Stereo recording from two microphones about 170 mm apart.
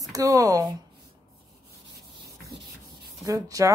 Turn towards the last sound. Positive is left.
turn(degrees=-20)  # may be behind; listen again after turning